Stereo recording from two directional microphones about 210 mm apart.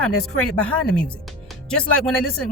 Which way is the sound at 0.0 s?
5° left (ahead or behind).